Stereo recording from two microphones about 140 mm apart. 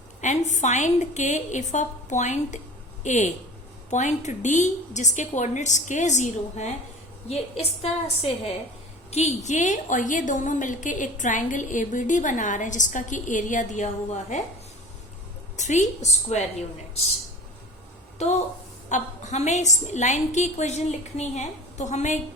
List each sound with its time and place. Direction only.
0.2 s a woman's voice: 55° left (ahead or behind)
7.3 s a woman's voice: 45° left (ahead or behind)
15.5 s a woman's voice: 60° left (ahead or behind)
18.2 s a woman's voice: 55° left (ahead or behind)